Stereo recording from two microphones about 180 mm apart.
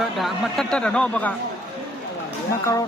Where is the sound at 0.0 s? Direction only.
Centre (ahead or behind).